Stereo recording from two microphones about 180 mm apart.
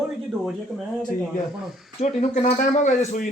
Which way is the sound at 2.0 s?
40° left (ahead or behind).